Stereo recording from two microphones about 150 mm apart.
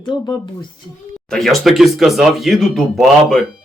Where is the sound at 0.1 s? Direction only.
30° left (ahead or behind).